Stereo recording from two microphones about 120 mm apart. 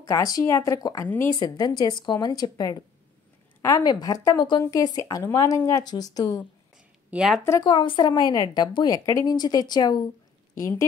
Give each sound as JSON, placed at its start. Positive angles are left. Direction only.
{"t": 0.0, "sound": "speech", "side_deg": 30}
{"t": 7.1, "sound": "speech", "side_deg": -5}
{"t": 7.6, "sound": "speech", "side_deg": 40}
{"t": 10.6, "sound": "speech", "side_deg": 25}